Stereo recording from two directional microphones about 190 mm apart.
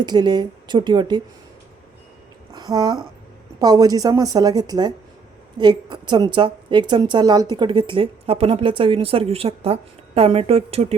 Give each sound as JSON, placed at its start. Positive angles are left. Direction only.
{"t": 0.0, "sound": "a woman's voice", "side_deg": -25}
{"t": 2.5, "sound": "a woman's voice", "side_deg": -20}